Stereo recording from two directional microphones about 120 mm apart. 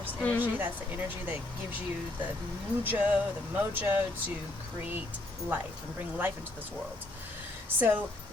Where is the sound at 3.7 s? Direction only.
15° right (ahead or behind).